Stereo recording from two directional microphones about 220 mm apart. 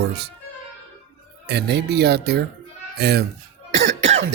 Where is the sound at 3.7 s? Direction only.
55° right (ahead or behind).